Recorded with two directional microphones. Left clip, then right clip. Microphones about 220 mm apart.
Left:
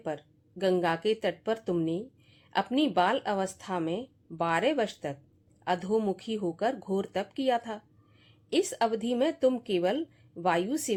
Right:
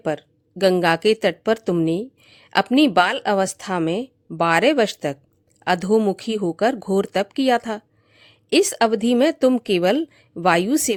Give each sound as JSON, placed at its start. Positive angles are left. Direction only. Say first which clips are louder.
{"t": 0.0, "sound": "speech", "louder": "right 11 dB", "side_deg": -50}